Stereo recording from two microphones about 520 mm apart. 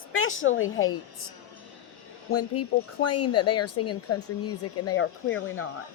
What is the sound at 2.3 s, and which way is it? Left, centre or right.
Speech, left.